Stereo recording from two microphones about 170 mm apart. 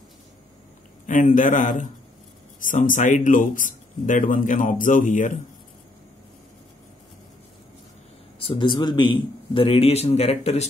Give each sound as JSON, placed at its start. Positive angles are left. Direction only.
{"t": 1.0, "sound": "speech", "side_deg": 50}
{"t": 8.4, "sound": "a man's voice", "side_deg": 30}